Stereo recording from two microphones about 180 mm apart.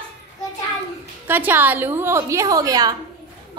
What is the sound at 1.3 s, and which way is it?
A woman's voice, 10° right (ahead or behind).